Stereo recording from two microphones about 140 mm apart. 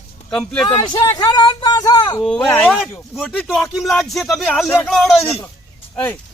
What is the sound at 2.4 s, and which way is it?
Speech, 10° left (ahead or behind).